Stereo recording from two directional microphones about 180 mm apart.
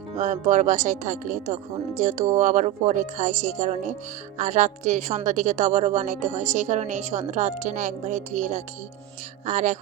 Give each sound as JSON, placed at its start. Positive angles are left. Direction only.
{"t": 0.2, "sound": "a woman's voice", "side_deg": -45}